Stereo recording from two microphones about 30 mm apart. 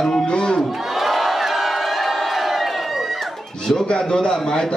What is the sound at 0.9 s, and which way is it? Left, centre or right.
Crowd, centre.